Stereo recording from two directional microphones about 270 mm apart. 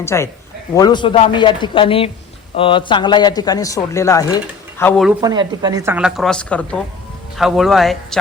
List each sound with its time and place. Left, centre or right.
0.0 s a man's voice: centre
5.2 s a woman's voice: centre